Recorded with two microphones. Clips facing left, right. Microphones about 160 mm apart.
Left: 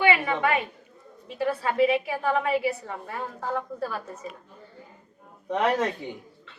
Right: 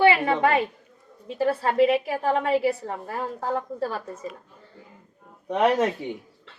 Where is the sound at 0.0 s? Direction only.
35° right (ahead or behind).